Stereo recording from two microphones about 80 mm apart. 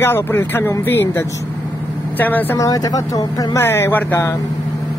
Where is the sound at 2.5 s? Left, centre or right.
Left.